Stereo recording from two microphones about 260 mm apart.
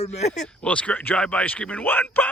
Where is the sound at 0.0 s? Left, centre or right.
Left.